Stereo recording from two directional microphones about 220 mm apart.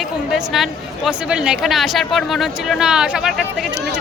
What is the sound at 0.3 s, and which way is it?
Speech, centre (ahead or behind).